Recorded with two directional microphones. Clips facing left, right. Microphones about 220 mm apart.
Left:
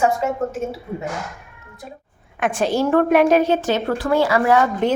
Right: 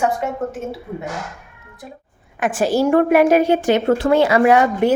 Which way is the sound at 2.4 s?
5° right (ahead or behind).